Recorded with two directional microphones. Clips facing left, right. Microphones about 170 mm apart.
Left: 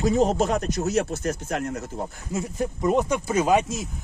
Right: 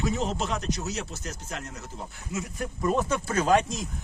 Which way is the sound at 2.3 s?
20° left (ahead or behind).